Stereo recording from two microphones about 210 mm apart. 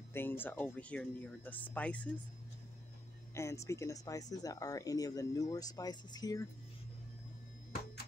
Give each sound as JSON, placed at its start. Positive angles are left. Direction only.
{"t": 0.1, "sound": "speech", "side_deg": 10}
{"t": 3.3, "sound": "speech", "side_deg": 15}